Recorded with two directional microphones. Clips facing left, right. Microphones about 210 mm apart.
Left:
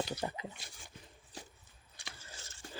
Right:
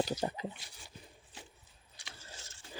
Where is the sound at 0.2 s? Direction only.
30° right (ahead or behind).